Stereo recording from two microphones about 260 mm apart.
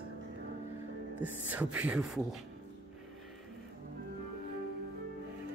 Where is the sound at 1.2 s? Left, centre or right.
Centre.